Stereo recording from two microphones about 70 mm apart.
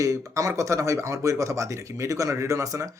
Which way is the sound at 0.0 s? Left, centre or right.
Right.